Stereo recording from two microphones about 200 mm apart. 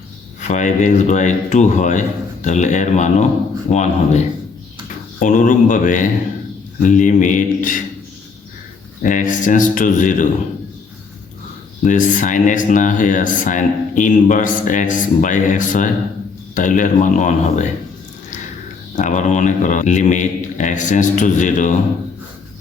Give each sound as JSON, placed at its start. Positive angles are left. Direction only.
{"t": 0.4, "sound": "speech", "side_deg": 35}
{"t": 5.2, "sound": "speech", "side_deg": 40}
{"t": 9.0, "sound": "speech", "side_deg": 40}
{"t": 11.8, "sound": "speech", "side_deg": 40}
{"t": 18.9, "sound": "speech", "side_deg": 40}